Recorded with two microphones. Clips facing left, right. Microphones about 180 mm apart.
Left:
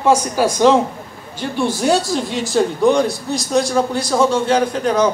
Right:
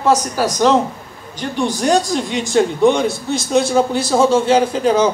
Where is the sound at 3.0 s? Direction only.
25° right (ahead or behind).